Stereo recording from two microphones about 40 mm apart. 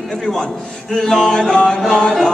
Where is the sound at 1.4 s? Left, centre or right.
Centre.